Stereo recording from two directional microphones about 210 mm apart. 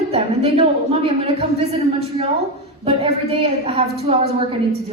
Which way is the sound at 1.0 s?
25° right (ahead or behind).